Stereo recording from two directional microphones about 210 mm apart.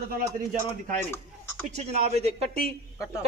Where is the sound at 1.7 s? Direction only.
30° right (ahead or behind).